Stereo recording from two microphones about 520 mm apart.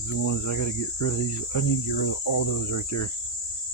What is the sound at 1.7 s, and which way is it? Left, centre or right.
Cricket, left.